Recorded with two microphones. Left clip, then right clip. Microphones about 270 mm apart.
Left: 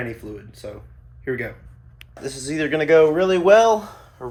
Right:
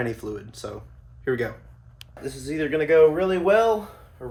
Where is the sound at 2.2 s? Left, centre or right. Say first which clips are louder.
Left 3 dB; left.